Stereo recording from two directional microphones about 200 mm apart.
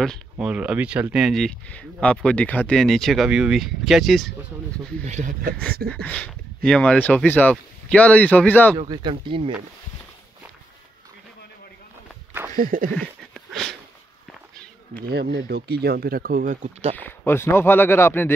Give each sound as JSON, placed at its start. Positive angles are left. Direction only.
{"t": 0.0, "sound": "speech", "side_deg": 0}
{"t": 5.0, "sound": "speech", "side_deg": -40}
{"t": 6.0, "sound": "speech", "side_deg": 5}
{"t": 8.7, "sound": "speech", "side_deg": -25}
{"t": 12.5, "sound": "speech", "side_deg": -45}
{"t": 12.9, "sound": "a sound", "side_deg": 0}
{"t": 15.0, "sound": "speech", "side_deg": -55}
{"t": 16.9, "sound": "speech", "side_deg": 10}